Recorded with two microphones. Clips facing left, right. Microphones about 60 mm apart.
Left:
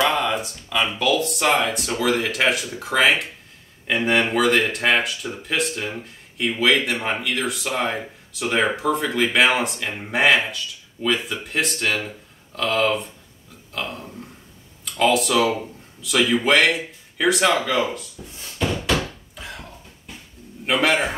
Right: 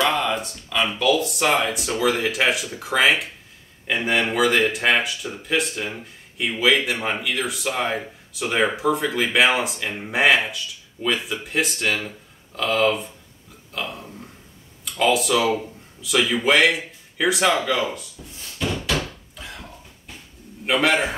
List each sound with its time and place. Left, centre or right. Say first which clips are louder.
0.0 s speech: left 1 dB; centre
18.2 s speech: left 2 dB; centre
19.3 s a sound: left 2 dB; centre
20.6 s speech: even; centre